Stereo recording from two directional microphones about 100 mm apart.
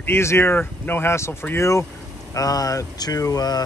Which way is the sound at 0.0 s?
25° left (ahead or behind).